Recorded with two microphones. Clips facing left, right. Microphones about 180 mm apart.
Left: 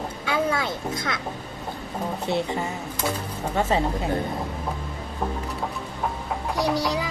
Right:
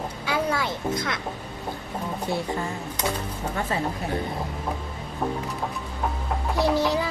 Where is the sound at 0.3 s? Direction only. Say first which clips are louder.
Left 1 dB; 25° left (ahead or behind).